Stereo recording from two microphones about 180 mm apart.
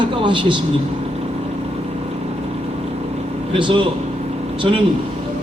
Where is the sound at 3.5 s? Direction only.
30° right (ahead or behind).